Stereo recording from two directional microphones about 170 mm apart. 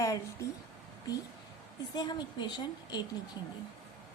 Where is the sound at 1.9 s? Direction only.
25° left (ahead or behind).